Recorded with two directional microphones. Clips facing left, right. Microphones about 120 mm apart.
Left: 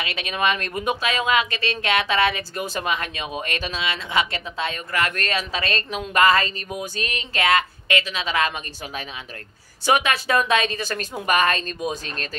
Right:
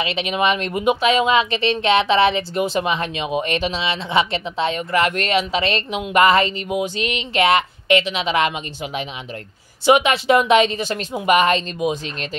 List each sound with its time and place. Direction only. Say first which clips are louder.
0.0 s speech: right 4 dB; 20° right (ahead or behind)